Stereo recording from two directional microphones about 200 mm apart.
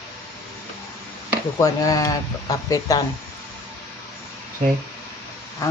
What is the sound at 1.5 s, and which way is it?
Speech, 15° left (ahead or behind).